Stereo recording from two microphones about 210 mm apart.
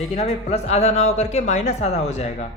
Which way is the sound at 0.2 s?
30° left (ahead or behind).